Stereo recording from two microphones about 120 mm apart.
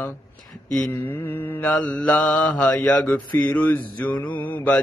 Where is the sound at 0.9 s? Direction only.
15° left (ahead or behind).